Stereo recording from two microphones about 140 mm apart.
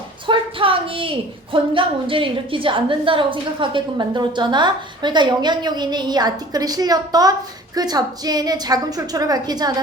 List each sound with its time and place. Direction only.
0.3 s a woman's voice: 40° right (ahead or behind)